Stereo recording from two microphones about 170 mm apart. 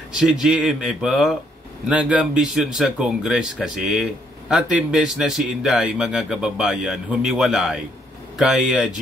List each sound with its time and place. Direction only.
0.2 s speech: 5° right (ahead or behind)